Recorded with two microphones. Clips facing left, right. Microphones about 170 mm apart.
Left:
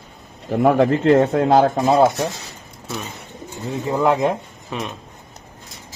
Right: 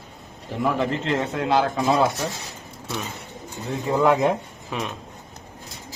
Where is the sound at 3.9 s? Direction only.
15° left (ahead or behind).